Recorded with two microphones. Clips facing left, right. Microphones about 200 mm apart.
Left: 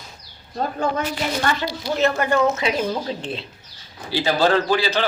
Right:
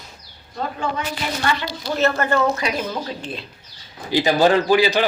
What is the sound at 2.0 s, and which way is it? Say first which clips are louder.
A woman's voice: even; 15° left (ahead or behind).